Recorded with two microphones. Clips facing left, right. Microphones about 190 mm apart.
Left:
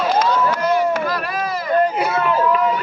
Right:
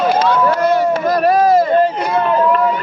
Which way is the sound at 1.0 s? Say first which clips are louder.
Right 10 dB; 45° right (ahead or behind).